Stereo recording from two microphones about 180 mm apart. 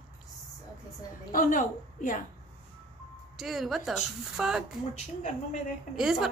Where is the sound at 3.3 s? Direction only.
Centre (ahead or behind).